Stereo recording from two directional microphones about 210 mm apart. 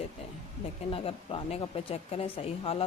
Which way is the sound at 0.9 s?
25° left (ahead or behind).